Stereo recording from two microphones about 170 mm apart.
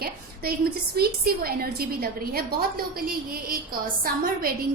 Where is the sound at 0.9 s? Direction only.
60° right (ahead or behind).